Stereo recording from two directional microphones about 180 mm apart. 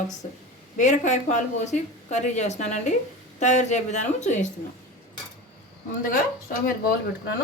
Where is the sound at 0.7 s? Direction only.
45° left (ahead or behind).